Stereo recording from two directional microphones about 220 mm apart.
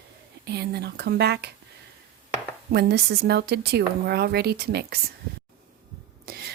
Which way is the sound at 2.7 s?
50° right (ahead or behind).